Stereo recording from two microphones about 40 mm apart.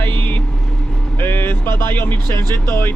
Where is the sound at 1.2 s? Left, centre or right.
Left.